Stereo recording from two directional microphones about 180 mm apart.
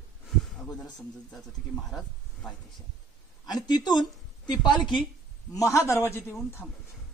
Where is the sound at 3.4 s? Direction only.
25° left (ahead or behind).